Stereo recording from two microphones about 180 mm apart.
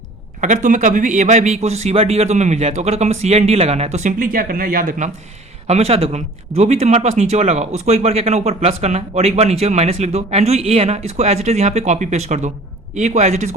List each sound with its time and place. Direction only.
0.4 s speech: 45° right (ahead or behind)